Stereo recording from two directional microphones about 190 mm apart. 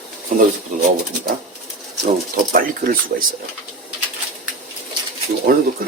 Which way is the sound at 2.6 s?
45° right (ahead or behind).